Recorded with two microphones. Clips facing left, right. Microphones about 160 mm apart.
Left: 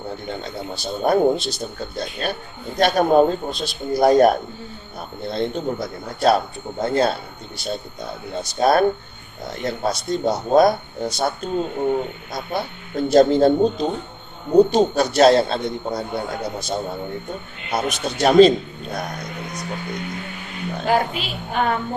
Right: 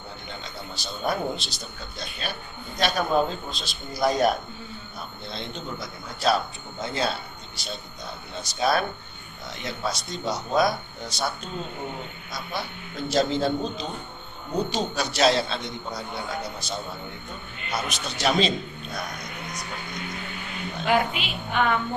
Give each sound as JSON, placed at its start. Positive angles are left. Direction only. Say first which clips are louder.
{"t": 0.3, "sound": "a man's voice", "louder": "left 7 dB", "side_deg": 55}
{"t": 20.8, "sound": "a woman's voice", "louder": "left 3 dB", "side_deg": 35}